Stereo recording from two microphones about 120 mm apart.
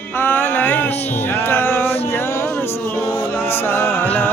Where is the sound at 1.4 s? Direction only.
20° left (ahead or behind).